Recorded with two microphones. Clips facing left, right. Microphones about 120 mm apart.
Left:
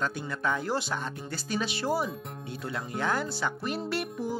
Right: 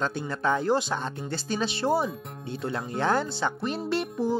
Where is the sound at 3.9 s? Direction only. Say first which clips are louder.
Right 5 dB; 25° right (ahead or behind).